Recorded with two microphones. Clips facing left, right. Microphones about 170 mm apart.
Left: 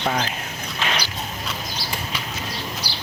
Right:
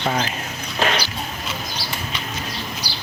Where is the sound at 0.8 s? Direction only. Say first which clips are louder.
Right 6 dB; 40° right (ahead or behind).